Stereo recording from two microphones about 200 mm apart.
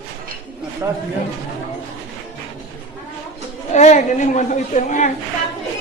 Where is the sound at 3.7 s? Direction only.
35° left (ahead or behind).